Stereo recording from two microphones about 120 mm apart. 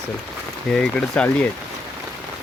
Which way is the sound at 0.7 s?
10° left (ahead or behind).